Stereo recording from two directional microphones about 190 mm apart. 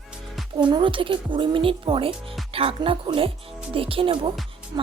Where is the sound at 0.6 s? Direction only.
25° right (ahead or behind).